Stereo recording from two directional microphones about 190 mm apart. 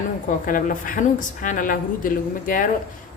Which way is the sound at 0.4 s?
45° left (ahead or behind).